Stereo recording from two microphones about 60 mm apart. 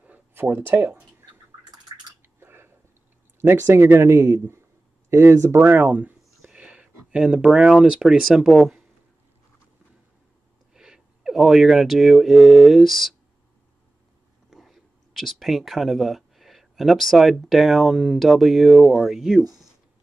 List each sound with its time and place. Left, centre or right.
0.3 s a sound: right
2.4 s a sound: right
3.3 s a man's voice: right
5.6 s speech: right
6.5 s speech: centre
10.7 s speech: centre
14.5 s speech: centre